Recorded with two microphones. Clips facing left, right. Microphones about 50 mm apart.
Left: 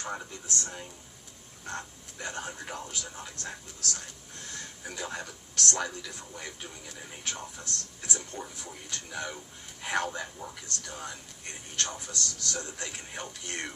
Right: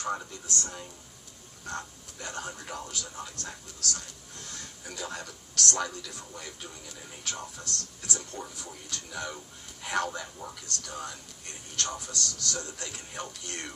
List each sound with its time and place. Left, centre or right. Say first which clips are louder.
0.2 s a man's voice: right 1 dB; left